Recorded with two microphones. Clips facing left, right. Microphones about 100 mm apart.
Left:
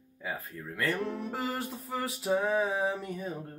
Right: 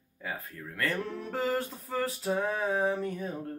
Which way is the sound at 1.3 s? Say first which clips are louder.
Right 3 dB; 5° left (ahead or behind).